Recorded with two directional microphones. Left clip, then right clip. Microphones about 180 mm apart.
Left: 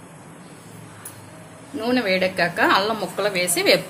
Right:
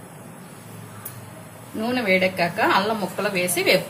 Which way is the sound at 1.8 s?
55° left (ahead or behind).